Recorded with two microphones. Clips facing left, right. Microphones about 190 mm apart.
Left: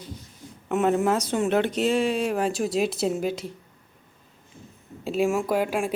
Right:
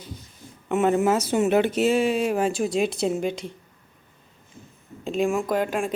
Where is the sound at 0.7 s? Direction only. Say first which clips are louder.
Right 2 dB; centre (ahead or behind).